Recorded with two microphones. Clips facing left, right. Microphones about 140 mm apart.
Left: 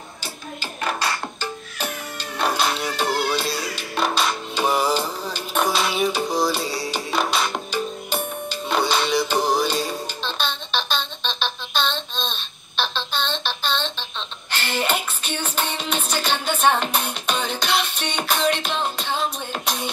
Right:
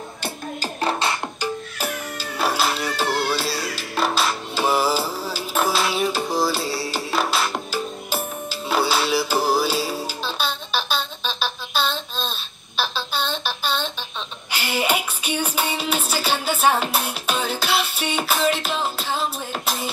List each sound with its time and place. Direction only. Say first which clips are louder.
0.6 s music: right 3 dB; 30° right (ahead or behind)
1.4 s music: right 3 dB; 5° right (ahead or behind)